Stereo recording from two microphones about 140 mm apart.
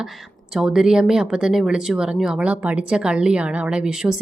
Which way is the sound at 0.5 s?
5° right (ahead or behind).